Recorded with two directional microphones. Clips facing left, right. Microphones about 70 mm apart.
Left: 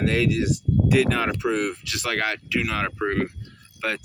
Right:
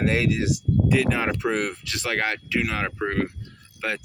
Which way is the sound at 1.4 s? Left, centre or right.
Right.